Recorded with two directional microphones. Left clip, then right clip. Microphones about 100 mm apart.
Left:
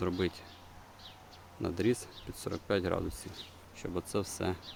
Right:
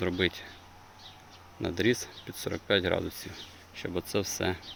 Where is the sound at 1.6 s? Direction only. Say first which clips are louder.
Right 4 dB; centre (ahead or behind).